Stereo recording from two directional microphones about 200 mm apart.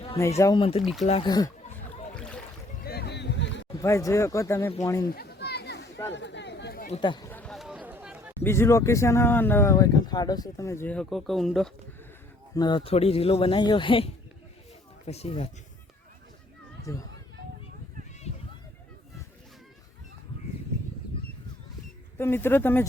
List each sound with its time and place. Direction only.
0.2 s speech: 15° left (ahead or behind)
1.6 s rowboat: 35° left (ahead or behind)
2.8 s boat: 50° left (ahead or behind)
3.8 s speech: 15° left (ahead or behind)
5.0 s a sound: 50° left (ahead or behind)
6.9 s speech: 25° left (ahead or behind)
7.3 s a sound: 5° left (ahead or behind)
8.4 s speech: 15° left (ahead or behind)
12.5 s speech: 20° left (ahead or behind)
16.9 s speech: 15° left (ahead or behind)
22.2 s speech: 10° left (ahead or behind)